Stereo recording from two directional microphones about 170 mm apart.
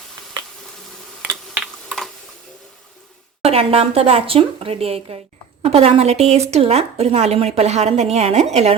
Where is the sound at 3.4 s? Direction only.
35° right (ahead or behind).